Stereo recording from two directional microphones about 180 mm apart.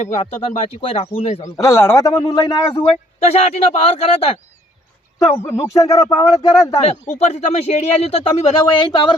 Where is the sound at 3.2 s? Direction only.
35° left (ahead or behind).